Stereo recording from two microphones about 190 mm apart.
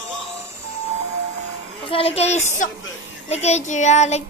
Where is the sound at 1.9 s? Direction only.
30° left (ahead or behind).